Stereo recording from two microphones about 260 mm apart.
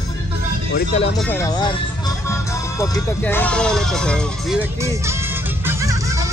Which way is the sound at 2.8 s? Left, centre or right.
Centre.